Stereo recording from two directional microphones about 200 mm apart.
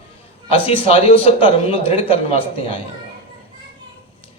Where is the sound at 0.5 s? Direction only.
30° left (ahead or behind).